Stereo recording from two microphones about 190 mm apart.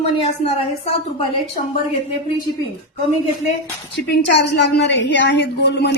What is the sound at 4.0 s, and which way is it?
A woman's voice, 60° left (ahead or behind).